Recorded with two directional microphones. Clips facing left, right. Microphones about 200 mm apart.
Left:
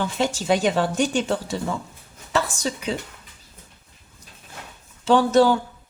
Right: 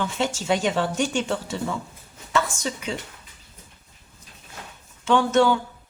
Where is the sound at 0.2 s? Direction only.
35° left (ahead or behind).